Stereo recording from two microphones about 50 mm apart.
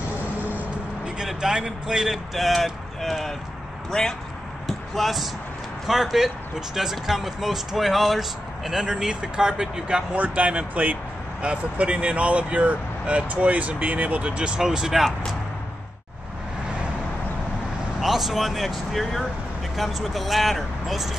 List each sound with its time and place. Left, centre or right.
0.4 s vehicle: right
1.0 s speech: centre
3.9 s speech: centre
4.6 s speech: centre
10.1 s speech: right
14.6 s speech: centre
18.0 s speech: centre